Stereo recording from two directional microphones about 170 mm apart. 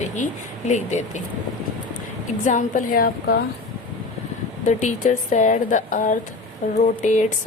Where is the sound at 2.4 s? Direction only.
50° left (ahead or behind).